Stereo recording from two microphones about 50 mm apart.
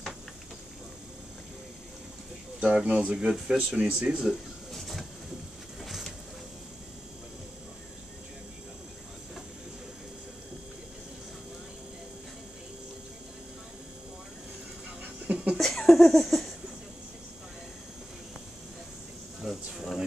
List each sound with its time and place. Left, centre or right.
2.6 s speech: right
4.7 s train: centre
5.8 s vehicle: centre
15.2 s a sound: right
15.5 s a sound: centre
19.5 s insect: centre